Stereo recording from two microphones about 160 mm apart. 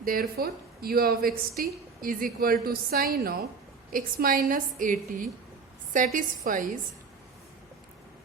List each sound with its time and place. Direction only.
0.0 s a woman's voice: 65° right (ahead or behind)